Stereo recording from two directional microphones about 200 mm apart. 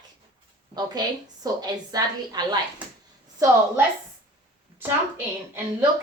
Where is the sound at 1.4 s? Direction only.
20° right (ahead or behind).